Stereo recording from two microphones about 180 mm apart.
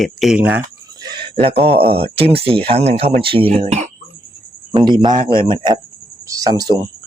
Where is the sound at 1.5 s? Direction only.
30° right (ahead or behind).